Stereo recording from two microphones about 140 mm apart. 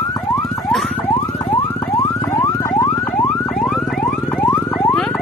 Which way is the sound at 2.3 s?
20° left (ahead or behind).